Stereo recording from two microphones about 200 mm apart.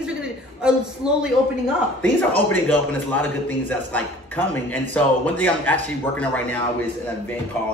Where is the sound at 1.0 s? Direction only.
5° right (ahead or behind).